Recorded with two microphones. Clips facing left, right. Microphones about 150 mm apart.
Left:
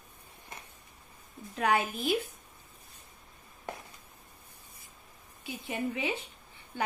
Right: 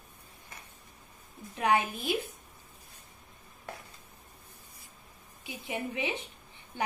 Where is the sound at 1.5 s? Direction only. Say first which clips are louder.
Right 1 dB; 20° right (ahead or behind).